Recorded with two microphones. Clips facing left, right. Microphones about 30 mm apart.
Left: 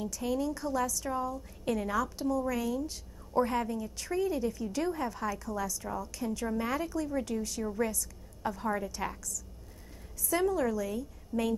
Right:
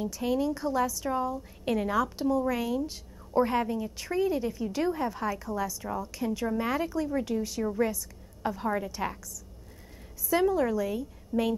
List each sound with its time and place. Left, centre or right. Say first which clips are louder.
0.0 s a woman's voice: right 4 dB; centre
10.3 s a woman's voice: right 4 dB; centre